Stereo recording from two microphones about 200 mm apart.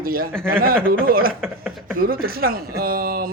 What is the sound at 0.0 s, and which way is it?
Speech, 45° right (ahead or behind).